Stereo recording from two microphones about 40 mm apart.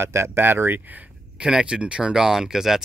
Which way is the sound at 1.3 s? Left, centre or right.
Right.